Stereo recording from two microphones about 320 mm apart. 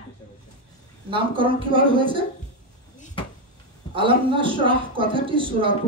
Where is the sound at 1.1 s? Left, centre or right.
Centre.